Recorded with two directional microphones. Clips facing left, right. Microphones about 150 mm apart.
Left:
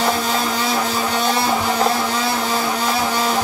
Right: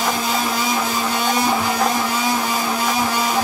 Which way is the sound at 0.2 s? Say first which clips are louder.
Left 1 dB; 10° right (ahead or behind).